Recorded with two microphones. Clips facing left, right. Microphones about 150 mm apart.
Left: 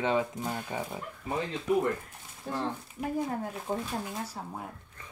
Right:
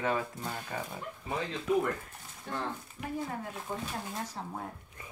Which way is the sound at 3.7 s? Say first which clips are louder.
Left 6 dB; 40° left (ahead or behind).